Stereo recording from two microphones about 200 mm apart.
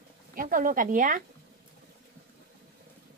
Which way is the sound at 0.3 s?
45° right (ahead or behind).